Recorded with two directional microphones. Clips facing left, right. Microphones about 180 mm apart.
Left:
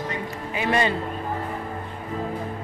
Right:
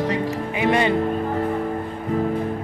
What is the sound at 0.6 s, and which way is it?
Speech, 20° right (ahead or behind).